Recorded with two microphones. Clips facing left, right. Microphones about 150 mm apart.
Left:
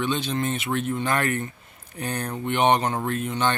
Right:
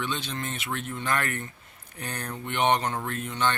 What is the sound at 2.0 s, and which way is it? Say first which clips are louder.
Mantra: left 6 dB; 15° left (ahead or behind).